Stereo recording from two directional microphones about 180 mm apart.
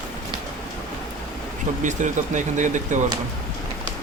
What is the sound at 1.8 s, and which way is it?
Speech, 45° right (ahead or behind).